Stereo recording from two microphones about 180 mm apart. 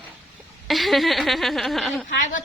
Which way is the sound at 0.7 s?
Centre (ahead or behind).